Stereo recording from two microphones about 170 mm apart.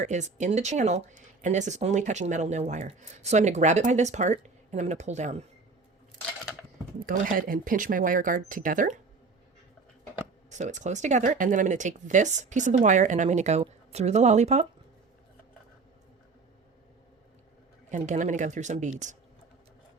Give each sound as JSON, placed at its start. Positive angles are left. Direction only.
{"t": 0.0, "sound": "speech", "side_deg": -45}
{"t": 7.0, "sound": "speech", "side_deg": -55}
{"t": 10.5, "sound": "speech", "side_deg": -45}
{"t": 17.9, "sound": "speech", "side_deg": -45}